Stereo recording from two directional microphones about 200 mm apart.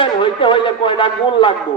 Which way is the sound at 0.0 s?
25° left (ahead or behind).